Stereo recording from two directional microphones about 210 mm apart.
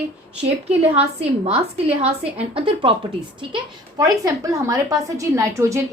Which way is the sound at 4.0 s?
15° right (ahead or behind).